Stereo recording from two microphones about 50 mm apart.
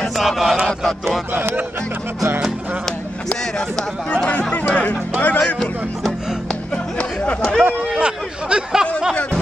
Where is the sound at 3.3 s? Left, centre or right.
Centre.